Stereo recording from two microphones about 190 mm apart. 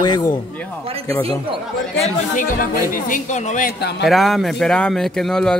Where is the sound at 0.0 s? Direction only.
20° left (ahead or behind).